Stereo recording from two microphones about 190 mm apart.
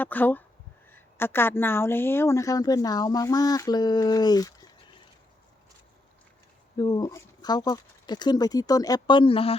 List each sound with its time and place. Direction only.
0.0 s speech: 10° left (ahead or behind)
6.7 s speech: 20° left (ahead or behind)